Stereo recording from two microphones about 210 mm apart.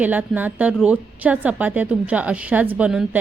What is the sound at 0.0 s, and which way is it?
A woman's voice, 10° right (ahead or behind).